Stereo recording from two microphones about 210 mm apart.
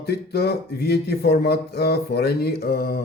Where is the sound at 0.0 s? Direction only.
50° left (ahead or behind).